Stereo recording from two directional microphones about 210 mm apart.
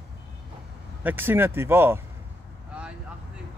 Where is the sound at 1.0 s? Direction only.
10° right (ahead or behind).